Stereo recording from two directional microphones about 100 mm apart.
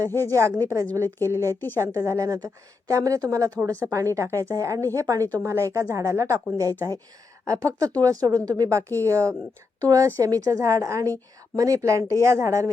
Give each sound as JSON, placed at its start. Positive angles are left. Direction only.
{"t": 0.1, "sound": "speech", "side_deg": 25}
{"t": 0.3, "sound": "a woman's voice", "side_deg": -30}
{"t": 1.4, "sound": "speech", "side_deg": 25}
{"t": 1.8, "sound": "a woman's voice", "side_deg": -30}